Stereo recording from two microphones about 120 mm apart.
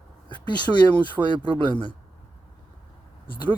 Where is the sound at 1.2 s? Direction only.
10° right (ahead or behind).